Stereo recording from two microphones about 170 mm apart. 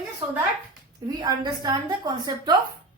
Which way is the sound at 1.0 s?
25° right (ahead or behind).